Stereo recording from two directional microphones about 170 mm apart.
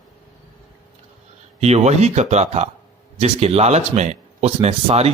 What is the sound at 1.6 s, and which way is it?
Speech, 40° right (ahead or behind).